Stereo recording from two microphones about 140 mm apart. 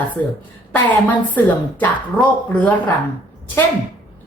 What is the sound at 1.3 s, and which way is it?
Speech, 10° left (ahead or behind).